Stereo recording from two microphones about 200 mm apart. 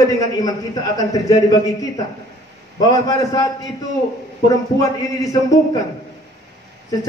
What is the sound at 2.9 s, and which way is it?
Speech, 20° left (ahead or behind).